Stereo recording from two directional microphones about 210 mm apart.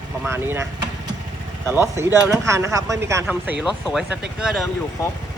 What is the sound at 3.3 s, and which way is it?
Speech, centre (ahead or behind).